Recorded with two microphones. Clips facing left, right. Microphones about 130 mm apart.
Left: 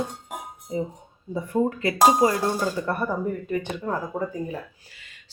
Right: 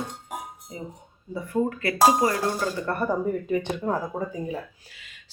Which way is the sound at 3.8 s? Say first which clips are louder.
Even; 10° right (ahead or behind).